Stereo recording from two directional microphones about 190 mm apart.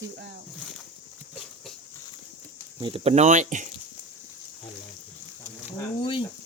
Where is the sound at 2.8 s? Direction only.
30° right (ahead or behind).